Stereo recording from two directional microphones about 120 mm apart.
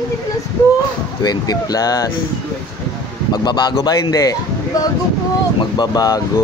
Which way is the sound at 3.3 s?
40° left (ahead or behind).